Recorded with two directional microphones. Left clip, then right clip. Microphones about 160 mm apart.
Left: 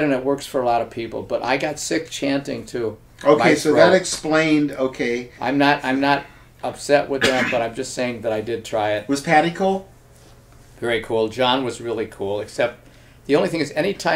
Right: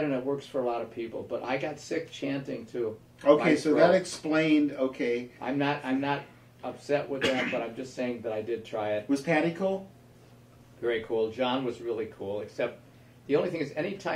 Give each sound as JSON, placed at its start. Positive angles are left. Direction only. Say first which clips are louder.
{"t": 0.0, "sound": "speech", "louder": "left 10 dB", "side_deg": 40}
{"t": 10.8, "sound": "speech", "louder": "left 8 dB", "side_deg": 35}